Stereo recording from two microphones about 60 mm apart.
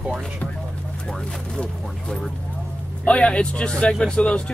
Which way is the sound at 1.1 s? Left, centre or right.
Centre.